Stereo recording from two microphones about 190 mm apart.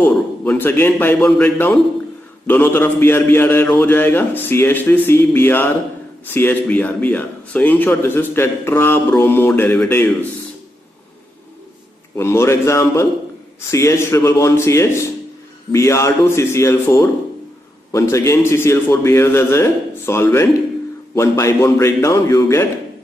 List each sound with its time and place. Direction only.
0.0 s a man's voice: 10° left (ahead or behind)
12.2 s a man's voice: 15° left (ahead or behind)